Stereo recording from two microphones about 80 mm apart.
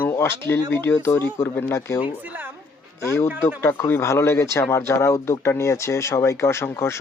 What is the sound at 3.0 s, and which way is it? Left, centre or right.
A man's voice, left.